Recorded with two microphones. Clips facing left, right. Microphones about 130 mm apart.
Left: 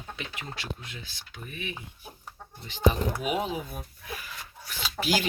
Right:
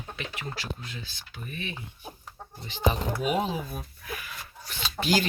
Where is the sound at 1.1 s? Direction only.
15° left (ahead or behind).